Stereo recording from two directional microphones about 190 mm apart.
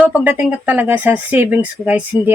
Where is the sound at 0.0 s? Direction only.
10° right (ahead or behind).